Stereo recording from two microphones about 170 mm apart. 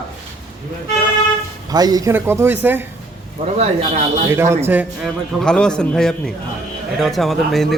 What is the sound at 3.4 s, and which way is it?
Speech, 40° right (ahead or behind).